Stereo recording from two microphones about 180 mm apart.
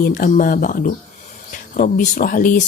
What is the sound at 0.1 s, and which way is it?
Speech, 50° left (ahead or behind).